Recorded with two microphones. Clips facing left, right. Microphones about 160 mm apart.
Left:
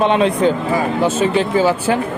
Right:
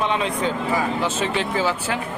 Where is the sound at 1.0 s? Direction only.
40° left (ahead or behind).